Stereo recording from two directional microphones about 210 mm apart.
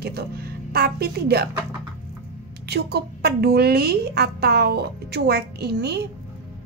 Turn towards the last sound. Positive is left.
turn(degrees=-50)  # may be behind; listen again after turning